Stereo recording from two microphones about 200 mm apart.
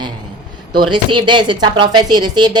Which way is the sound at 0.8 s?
25° right (ahead or behind).